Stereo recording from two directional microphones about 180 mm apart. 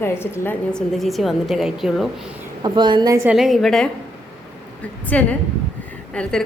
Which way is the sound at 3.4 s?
Centre (ahead or behind).